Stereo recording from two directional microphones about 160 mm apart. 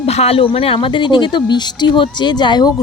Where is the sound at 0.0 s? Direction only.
40° left (ahead or behind).